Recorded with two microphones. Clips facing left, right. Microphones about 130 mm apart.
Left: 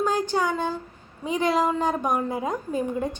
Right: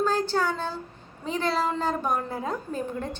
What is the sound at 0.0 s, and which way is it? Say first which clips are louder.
A woman's voice: left 1 dB; 15° left (ahead or behind).